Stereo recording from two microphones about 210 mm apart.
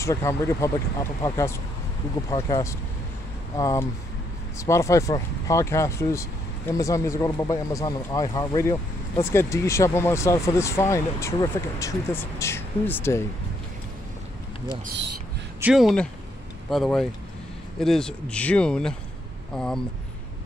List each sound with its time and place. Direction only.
0.0 s speech: 15° left (ahead or behind)
15.6 s speech: centre (ahead or behind)